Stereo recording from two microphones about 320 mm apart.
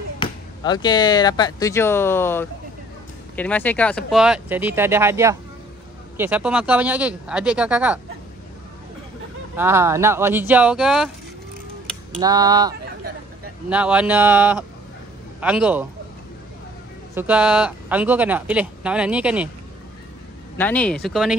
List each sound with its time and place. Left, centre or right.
0.2 s speech: centre
9.6 s speech: centre
12.2 s speech: centre
17.1 s speech: centre
20.5 s speech: centre